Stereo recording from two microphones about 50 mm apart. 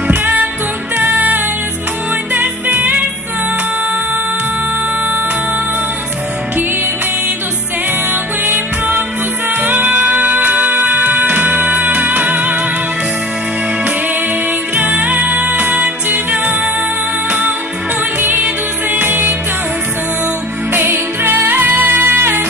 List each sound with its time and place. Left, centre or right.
0.1 s music: right
8.1 s music: right
14.8 s music: right
18.4 s music: right
20.7 s music: right